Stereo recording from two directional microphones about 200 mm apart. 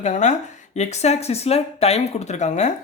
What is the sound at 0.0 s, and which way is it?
Speech, 35° left (ahead or behind).